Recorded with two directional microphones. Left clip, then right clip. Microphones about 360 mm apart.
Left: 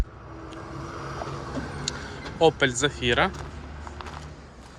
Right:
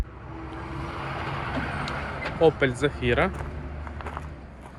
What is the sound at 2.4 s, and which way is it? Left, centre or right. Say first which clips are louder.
Speech: left 1 dB; centre.